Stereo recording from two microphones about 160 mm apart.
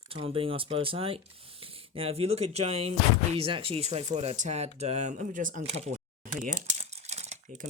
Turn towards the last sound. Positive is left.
turn(degrees=-45)  # may be behind; listen again after turning